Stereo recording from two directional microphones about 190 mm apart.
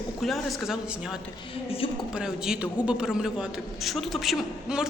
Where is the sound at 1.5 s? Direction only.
30° left (ahead or behind).